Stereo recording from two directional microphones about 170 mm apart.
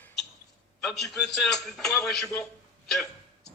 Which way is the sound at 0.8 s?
Centre (ahead or behind).